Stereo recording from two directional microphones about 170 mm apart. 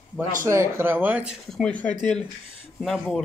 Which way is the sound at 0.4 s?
15° right (ahead or behind).